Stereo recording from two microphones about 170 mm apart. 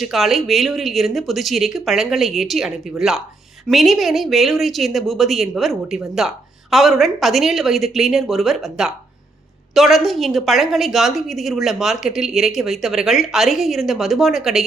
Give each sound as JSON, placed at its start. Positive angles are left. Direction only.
{"t": 0.0, "sound": "speech", "side_deg": 0}